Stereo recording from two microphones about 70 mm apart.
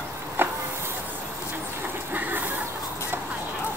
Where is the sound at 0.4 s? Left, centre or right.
Right.